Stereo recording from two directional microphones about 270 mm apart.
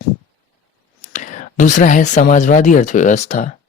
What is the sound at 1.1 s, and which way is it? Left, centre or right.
Speech, left.